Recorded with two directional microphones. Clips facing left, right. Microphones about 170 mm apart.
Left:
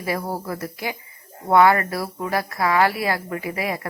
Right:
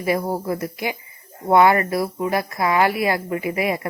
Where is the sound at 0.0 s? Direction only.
20° right (ahead or behind).